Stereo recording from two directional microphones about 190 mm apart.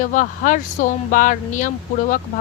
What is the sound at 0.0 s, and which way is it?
A woman's voice, 45° left (ahead or behind).